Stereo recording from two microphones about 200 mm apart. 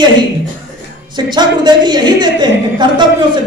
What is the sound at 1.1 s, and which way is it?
A man's voice, 20° right (ahead or behind).